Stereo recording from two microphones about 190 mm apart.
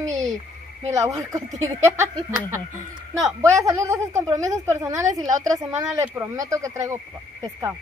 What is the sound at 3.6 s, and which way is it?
A woman's voice, 15° right (ahead or behind).